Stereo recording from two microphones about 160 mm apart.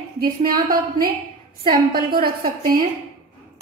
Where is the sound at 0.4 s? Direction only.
65° right (ahead or behind).